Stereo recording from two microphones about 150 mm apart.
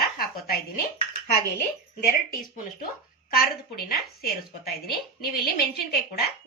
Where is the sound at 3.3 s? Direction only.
80° left.